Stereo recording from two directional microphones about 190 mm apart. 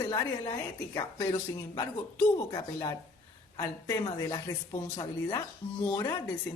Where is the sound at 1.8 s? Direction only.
20° left (ahead or behind).